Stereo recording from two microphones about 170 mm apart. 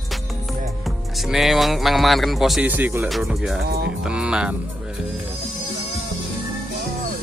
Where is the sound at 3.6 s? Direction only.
65° right (ahead or behind).